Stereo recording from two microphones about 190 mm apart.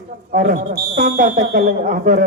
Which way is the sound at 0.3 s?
45° right (ahead or behind).